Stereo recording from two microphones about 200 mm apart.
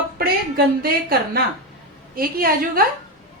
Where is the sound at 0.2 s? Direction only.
50° right (ahead or behind).